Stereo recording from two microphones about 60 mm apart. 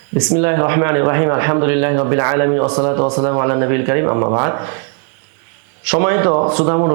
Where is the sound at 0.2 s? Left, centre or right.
Centre.